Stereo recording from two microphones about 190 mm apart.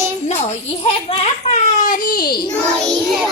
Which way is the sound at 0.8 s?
30° left (ahead or behind).